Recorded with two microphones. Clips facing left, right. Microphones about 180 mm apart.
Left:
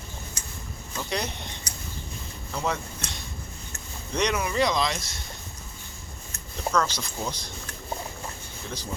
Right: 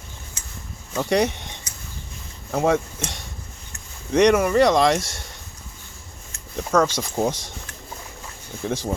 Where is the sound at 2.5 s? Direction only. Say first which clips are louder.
Right 10 dB; 90° right.